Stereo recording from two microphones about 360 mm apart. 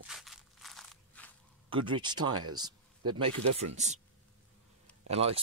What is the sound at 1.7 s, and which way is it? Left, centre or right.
Speech, centre.